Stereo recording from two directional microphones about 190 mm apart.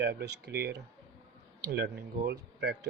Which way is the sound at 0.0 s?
60° right (ahead or behind).